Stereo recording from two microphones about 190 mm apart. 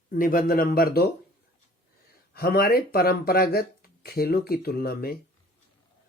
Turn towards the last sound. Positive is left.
turn(degrees=55)  # may be behind; listen again after turning